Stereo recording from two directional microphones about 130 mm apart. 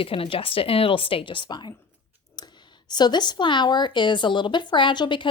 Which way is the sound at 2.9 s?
35° left (ahead or behind).